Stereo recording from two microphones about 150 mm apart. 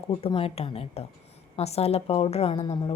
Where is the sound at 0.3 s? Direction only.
40° left (ahead or behind).